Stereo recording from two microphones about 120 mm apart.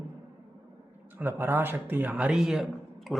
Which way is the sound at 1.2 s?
20° right (ahead or behind).